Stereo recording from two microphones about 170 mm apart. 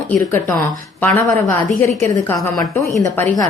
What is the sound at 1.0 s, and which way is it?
A woman's voice, 10° left (ahead or behind).